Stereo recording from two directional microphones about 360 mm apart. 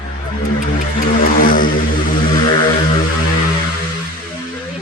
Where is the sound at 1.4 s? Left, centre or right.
Left.